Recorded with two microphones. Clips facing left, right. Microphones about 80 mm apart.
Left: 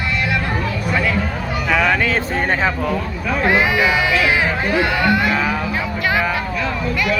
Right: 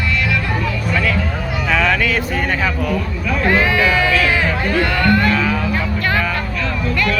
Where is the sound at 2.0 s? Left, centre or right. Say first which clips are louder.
Even; left.